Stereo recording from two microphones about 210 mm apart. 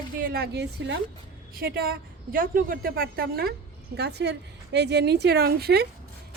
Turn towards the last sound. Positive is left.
turn(degrees=-50)  # may be behind; listen again after turning